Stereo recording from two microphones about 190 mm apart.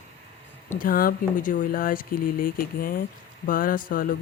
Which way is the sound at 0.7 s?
45° left (ahead or behind).